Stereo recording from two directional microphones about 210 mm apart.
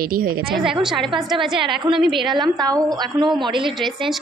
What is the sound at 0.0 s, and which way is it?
Speech, 45° right (ahead or behind).